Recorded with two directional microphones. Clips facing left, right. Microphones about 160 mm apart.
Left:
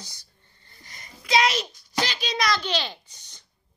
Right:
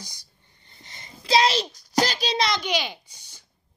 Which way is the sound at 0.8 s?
25° right (ahead or behind).